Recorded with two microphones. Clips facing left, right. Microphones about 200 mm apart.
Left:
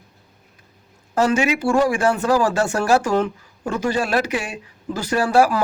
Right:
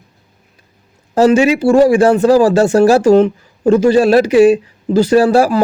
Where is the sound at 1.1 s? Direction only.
30° right (ahead or behind).